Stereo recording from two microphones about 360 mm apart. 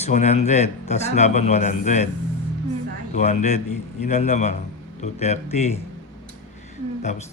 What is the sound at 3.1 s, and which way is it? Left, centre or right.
Speech, centre.